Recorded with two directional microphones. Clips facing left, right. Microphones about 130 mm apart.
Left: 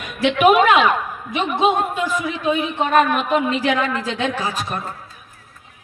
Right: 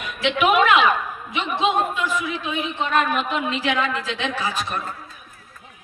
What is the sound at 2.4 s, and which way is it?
Speech, 45° left (ahead or behind).